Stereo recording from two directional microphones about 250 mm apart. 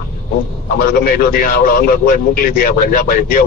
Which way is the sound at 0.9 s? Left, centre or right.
Left.